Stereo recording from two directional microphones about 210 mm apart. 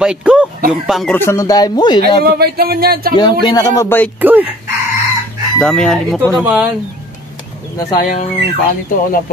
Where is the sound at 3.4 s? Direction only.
20° left (ahead or behind).